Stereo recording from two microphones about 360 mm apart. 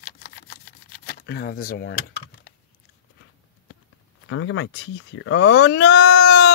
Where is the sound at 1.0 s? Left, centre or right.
Left.